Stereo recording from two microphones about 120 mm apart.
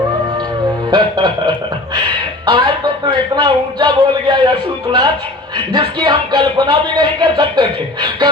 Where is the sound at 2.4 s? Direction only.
40° right (ahead or behind).